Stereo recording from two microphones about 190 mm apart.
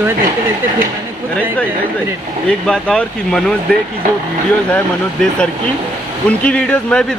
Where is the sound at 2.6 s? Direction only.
5° left (ahead or behind).